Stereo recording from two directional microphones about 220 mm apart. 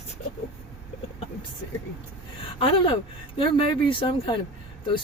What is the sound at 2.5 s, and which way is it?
Speech, 25° left (ahead or behind).